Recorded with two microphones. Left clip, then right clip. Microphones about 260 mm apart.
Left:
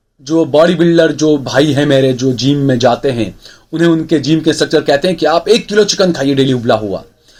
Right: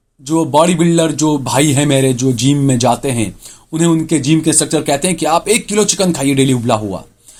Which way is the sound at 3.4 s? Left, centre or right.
Right.